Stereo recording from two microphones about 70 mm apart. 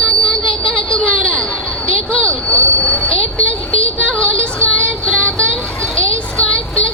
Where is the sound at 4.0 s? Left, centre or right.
Centre.